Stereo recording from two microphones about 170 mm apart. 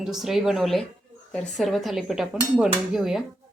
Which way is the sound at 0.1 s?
Centre (ahead or behind).